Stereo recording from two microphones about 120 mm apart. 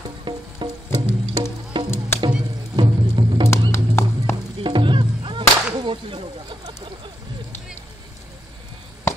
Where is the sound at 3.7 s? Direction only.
20° left (ahead or behind).